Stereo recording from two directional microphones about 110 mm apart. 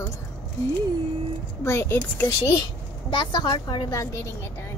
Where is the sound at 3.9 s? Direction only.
30° left (ahead or behind).